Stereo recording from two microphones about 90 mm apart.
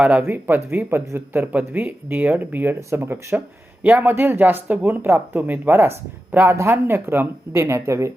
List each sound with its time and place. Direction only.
0.0 s a man's voice: 20° right (ahead or behind)